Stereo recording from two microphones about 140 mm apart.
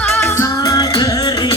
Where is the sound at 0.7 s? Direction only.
30° left (ahead or behind).